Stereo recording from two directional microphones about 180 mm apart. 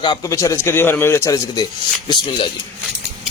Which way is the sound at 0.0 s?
20° left (ahead or behind).